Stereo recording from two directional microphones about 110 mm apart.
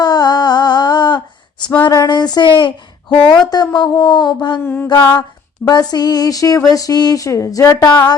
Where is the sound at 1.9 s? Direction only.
35° left (ahead or behind).